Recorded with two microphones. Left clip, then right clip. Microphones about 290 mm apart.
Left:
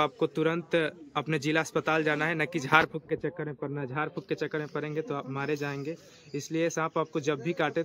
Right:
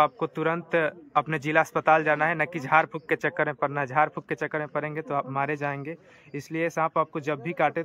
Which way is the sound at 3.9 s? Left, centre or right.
Centre.